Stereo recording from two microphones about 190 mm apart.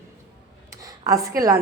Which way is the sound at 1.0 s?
20° right (ahead or behind).